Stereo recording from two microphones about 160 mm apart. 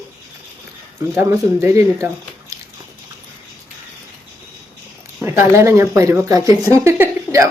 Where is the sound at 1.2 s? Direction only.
15° right (ahead or behind).